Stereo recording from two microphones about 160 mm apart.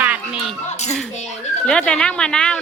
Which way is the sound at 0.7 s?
45° left (ahead or behind).